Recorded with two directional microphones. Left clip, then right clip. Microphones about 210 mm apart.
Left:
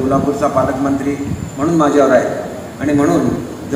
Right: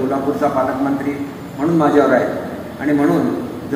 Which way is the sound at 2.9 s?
55° left (ahead or behind).